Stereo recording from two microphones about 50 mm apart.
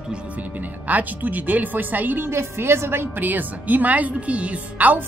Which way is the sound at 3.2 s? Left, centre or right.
Right.